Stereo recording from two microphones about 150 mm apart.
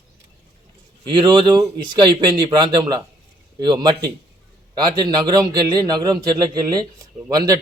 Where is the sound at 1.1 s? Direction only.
30° right (ahead or behind).